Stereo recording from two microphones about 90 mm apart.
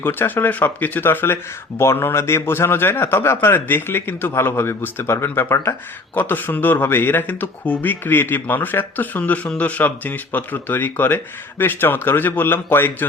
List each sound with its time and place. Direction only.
0.0 s a man's voice: 25° left (ahead or behind)